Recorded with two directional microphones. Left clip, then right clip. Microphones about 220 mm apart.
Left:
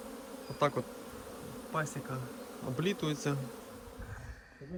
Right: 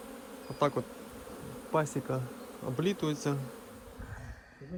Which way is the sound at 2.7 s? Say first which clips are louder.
Right 2 dB; 10° right (ahead or behind).